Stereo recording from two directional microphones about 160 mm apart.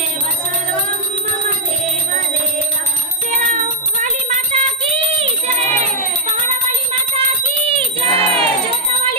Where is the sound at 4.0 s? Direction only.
50° right (ahead or behind).